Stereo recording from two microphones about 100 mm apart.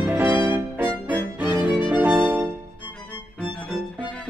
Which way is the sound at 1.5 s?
20° right (ahead or behind).